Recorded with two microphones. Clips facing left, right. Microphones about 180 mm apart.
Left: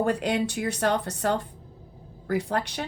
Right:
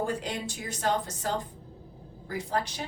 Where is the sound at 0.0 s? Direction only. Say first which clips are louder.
Left 7 dB; 65° left (ahead or behind).